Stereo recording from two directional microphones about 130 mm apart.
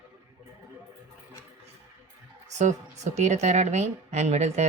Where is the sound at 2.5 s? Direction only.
65° right (ahead or behind).